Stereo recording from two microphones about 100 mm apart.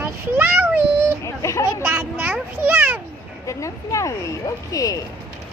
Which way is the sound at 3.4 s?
30° left (ahead or behind).